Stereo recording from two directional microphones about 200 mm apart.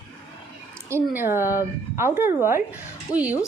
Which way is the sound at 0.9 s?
10° right (ahead or behind).